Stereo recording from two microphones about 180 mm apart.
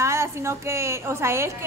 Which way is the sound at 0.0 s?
15° right (ahead or behind).